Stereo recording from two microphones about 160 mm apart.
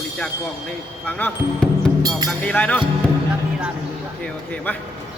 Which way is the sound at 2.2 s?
10° left (ahead or behind).